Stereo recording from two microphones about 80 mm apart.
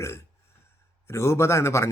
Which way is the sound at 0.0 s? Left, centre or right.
Left.